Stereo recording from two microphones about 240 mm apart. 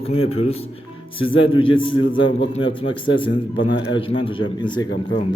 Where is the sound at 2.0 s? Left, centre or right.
Left.